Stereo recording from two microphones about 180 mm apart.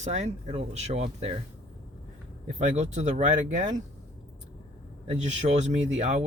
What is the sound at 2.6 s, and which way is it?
Speech, 40° right (ahead or behind).